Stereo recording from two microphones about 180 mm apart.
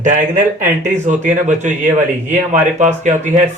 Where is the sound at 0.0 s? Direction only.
45° right (ahead or behind).